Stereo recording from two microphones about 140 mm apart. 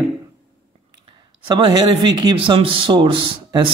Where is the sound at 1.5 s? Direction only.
30° right (ahead or behind).